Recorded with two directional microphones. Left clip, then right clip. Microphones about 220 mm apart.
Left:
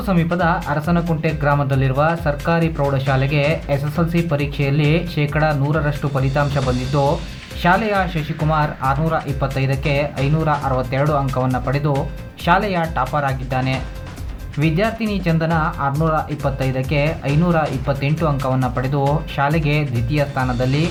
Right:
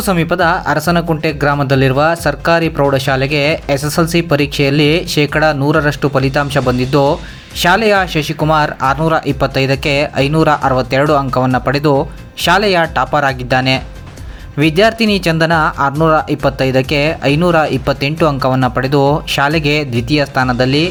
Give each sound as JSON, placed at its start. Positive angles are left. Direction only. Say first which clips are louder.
{"t": 0.0, "sound": "speech", "louder": "right 6 dB", "side_deg": -35}